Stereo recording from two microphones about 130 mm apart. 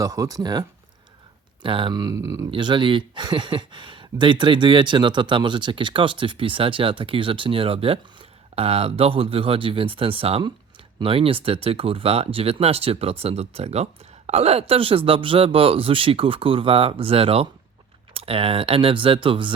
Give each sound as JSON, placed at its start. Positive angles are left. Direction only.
{"t": 0.0, "sound": "speech", "side_deg": -25}
{"t": 1.6, "sound": "speech", "side_deg": -40}
{"t": 2.5, "sound": "a man's voice", "side_deg": -35}